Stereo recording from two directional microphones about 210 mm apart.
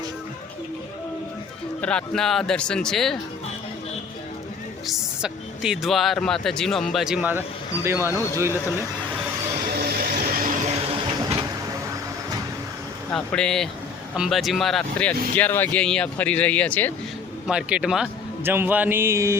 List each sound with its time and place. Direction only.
1.8 s speech: 5° left (ahead or behind)
4.9 s a man's voice: centre (ahead or behind)
9.7 s vehicle: 45° right (ahead or behind)
13.1 s a man's voice: 5° left (ahead or behind); by 19.4 s 15° right (ahead or behind)